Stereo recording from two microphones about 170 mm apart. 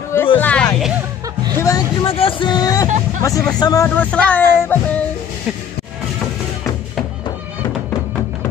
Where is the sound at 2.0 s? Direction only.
30° left (ahead or behind).